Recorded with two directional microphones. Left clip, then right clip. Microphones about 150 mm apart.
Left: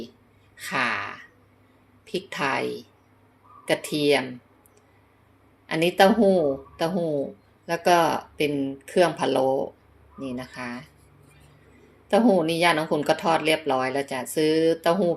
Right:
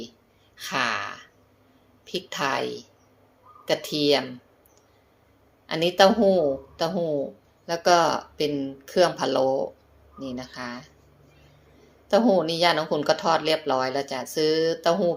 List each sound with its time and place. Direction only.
0.5 s speech: 10° left (ahead or behind)
5.6 s speech: 15° left (ahead or behind)
12.0 s speech: 20° left (ahead or behind)